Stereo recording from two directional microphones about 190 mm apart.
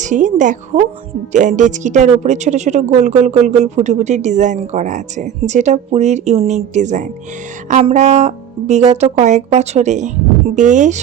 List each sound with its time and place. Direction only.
0.0 s speech: 40° right (ahead or behind)